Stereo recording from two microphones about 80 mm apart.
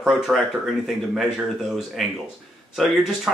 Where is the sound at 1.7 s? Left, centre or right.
Centre.